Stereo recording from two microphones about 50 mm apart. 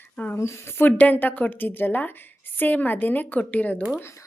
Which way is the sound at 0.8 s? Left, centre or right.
Left.